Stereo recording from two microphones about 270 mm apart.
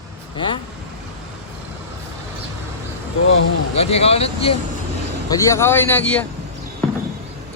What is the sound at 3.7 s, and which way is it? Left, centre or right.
Speech, left.